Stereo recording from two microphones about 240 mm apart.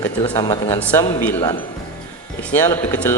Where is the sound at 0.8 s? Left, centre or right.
Centre.